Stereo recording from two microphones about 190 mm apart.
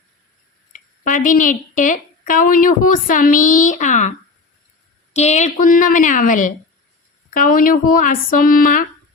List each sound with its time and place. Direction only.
0.7 s speech: 45° left (ahead or behind)
5.1 s speech: 35° left (ahead or behind)